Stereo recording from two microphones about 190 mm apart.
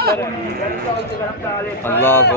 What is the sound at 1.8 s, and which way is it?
Speech, 10° left (ahead or behind).